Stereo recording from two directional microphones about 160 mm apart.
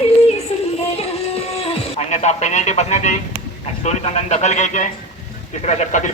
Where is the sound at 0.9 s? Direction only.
40° left (ahead or behind).